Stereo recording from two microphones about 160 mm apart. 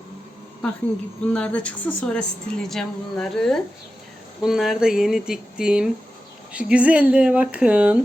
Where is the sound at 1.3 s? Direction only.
5° left (ahead or behind); by 8.0 s 10° right (ahead or behind).